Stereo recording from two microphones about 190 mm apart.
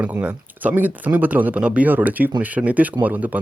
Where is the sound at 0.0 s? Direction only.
5° right (ahead or behind).